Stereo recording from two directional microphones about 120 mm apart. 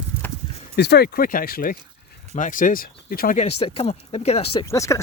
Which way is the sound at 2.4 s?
90° left.